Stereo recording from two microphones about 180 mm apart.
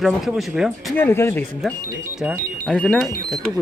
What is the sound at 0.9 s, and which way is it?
Speech, 10° left (ahead or behind).